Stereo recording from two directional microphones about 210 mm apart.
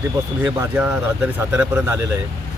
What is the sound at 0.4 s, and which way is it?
Speech, 10° right (ahead or behind).